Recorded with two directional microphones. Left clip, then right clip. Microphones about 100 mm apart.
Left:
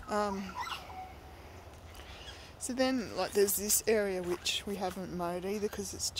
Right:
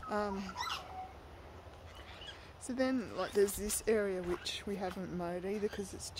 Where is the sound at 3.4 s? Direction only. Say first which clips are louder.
Left 2 dB; 15° right (ahead or behind).